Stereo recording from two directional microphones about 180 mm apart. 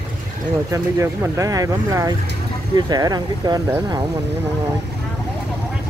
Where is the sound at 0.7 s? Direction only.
15° right (ahead or behind).